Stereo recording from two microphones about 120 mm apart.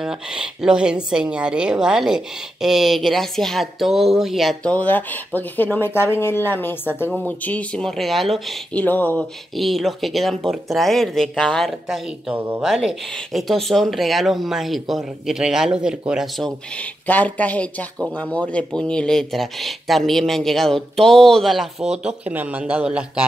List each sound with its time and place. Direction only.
0.0 s speech: 5° right (ahead or behind)
4.6 s speech: 15° left (ahead or behind)
8.7 s speech: 15° left (ahead or behind)
9.6 s speech: centre (ahead or behind)
12.4 s speech: 15° right (ahead or behind)
12.6 s speech: centre (ahead or behind)